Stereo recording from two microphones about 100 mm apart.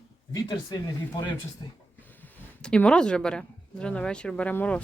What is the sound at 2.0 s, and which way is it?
Speech, 20° left (ahead or behind).